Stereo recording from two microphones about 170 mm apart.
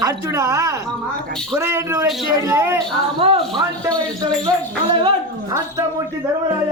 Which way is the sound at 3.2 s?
35° right (ahead or behind).